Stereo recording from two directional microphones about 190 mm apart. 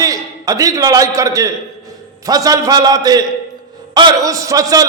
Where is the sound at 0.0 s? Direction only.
20° right (ahead or behind).